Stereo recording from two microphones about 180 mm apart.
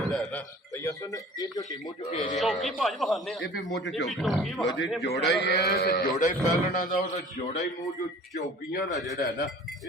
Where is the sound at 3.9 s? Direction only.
Centre (ahead or behind).